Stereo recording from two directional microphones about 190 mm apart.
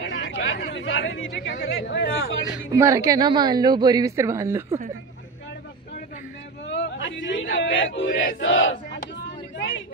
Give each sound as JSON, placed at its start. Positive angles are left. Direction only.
{"t": 0.0, "sound": "speech", "side_deg": 70}
{"t": 2.7, "sound": "a woman's voice", "side_deg": -15}
{"t": 6.7, "sound": "a sound", "side_deg": 75}
{"t": 7.6, "sound": "music", "side_deg": 80}
{"t": 8.4, "sound": "battle cry", "side_deg": 85}